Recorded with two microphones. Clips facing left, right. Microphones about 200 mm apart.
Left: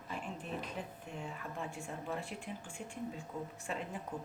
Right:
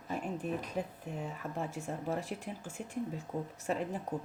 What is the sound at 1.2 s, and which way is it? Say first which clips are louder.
Speech: right 4 dB; 40° right (ahead or behind).